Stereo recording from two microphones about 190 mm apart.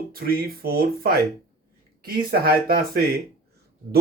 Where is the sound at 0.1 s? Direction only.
50° right (ahead or behind).